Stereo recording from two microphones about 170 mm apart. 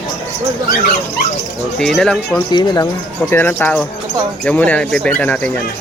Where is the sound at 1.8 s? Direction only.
5° left (ahead or behind).